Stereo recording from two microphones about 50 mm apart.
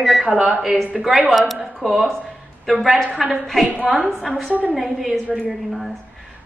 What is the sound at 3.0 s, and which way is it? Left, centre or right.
Speech, right.